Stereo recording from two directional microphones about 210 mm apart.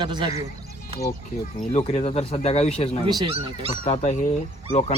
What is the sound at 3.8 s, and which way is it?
Speech, 35° left (ahead or behind).